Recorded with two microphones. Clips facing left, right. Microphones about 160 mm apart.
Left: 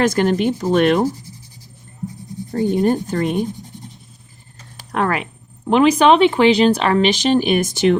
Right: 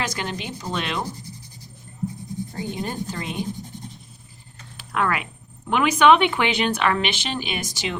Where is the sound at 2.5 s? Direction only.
50° left (ahead or behind).